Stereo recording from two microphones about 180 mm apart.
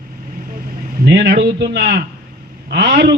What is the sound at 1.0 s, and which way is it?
A man's voice, 70° right (ahead or behind).